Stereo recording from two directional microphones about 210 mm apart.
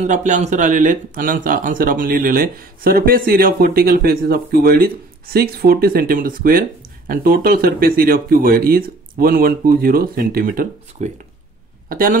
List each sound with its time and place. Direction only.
0.0 s speech: 35° right (ahead or behind)